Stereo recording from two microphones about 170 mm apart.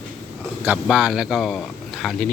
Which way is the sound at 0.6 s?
5° right (ahead or behind).